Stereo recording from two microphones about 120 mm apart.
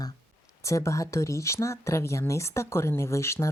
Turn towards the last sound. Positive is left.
turn(degrees=20)  # may be behind; listen again after turning